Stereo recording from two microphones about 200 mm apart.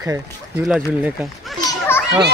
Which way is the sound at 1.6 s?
10° left (ahead or behind).